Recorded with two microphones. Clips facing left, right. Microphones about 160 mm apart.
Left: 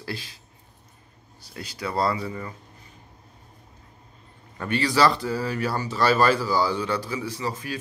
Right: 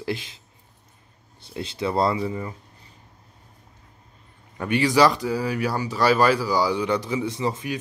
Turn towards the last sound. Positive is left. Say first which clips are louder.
# right 4 dB
turn(degrees=-20)  # may be behind; listen again after turning